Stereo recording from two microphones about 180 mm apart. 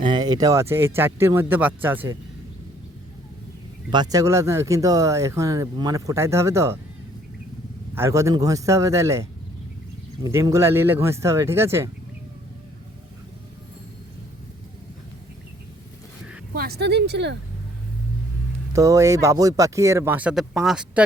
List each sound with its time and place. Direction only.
0.0 s speech: 25° right (ahead or behind)
3.9 s speech: 20° right (ahead or behind)
7.9 s speech: 15° right (ahead or behind)
10.2 s speech: 20° right (ahead or behind)
16.6 s a woman's voice: 60° right (ahead or behind)
18.7 s speech: 15° right (ahead or behind)